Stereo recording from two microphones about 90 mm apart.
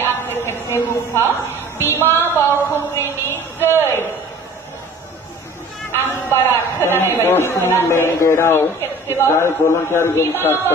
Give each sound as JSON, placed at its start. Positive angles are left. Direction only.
{"t": 0.3, "sound": "a sound", "side_deg": 25}
{"t": 2.2, "sound": "speech", "side_deg": 25}
{"t": 5.9, "sound": "speech", "side_deg": 25}